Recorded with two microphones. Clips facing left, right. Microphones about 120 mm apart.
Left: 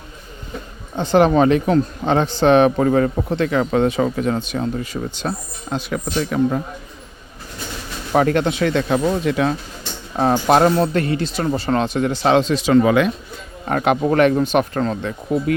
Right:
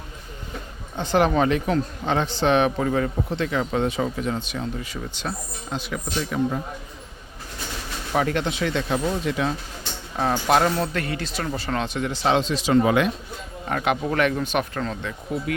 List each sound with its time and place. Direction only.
0.9 s speech: 30° left (ahead or behind); by 6.6 s 60° left (ahead or behind)
8.1 s speech: 50° left (ahead or behind); by 9.6 s 65° left (ahead or behind)
10.2 s speech: 40° left (ahead or behind); by 12.8 s 65° left (ahead or behind)
13.7 s speech: 45° left (ahead or behind)